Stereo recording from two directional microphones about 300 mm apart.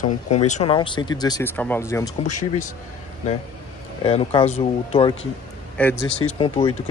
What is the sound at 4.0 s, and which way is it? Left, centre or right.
Speech, centre.